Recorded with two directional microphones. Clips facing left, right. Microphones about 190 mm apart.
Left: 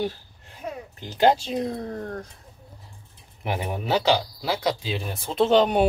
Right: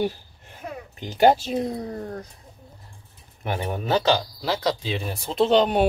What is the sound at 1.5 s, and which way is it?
Speech, 5° right (ahead or behind).